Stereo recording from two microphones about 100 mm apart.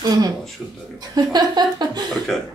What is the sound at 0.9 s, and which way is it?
Speech, 40° right (ahead or behind).